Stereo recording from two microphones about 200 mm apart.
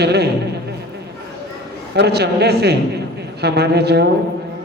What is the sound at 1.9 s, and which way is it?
Speech, 55° right (ahead or behind).